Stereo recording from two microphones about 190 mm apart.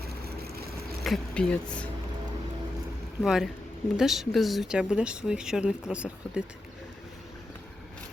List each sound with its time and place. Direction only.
0.0 s vehicle: 55° right (ahead or behind)
1.0 s speech: 5° left (ahead or behind)
3.2 s speech: 5° right (ahead or behind)